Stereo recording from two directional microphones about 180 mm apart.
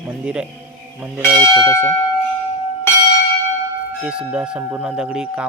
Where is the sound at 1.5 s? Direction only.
15° left (ahead or behind).